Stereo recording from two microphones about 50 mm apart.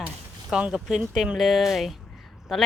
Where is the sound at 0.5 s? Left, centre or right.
Centre.